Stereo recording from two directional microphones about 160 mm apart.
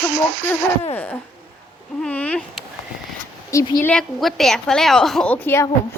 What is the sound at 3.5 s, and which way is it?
Speech, 20° left (ahead or behind).